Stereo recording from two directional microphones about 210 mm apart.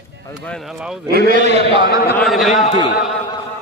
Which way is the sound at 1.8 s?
50° left (ahead or behind).